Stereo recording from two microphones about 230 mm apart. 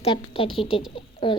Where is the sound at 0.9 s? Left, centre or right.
Left.